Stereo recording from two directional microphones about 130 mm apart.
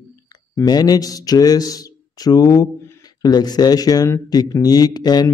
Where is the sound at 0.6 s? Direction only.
30° left (ahead or behind).